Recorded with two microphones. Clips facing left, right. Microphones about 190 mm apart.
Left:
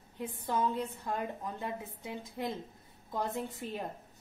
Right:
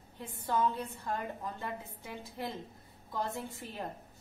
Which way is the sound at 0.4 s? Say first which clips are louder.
Right 1 dB; 20° left (ahead or behind).